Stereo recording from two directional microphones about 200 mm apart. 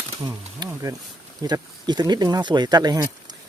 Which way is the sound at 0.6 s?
15° right (ahead or behind).